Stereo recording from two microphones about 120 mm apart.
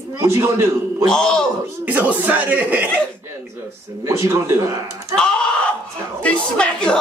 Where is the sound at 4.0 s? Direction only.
25° right (ahead or behind).